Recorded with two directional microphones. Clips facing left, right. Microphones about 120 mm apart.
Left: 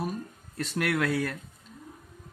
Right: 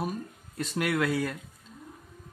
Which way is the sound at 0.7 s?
15° right (ahead or behind).